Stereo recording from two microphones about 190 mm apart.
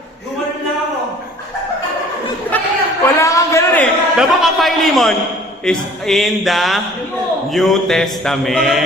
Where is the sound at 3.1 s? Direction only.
15° left (ahead or behind).